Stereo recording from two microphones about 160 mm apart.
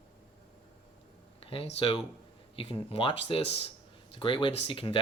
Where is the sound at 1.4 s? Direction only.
35° left (ahead or behind).